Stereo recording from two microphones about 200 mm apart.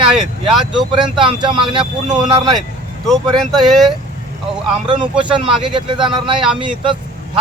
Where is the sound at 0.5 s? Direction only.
Centre (ahead or behind).